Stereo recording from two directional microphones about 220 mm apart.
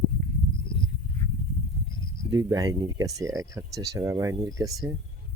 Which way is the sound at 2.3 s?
15° right (ahead or behind).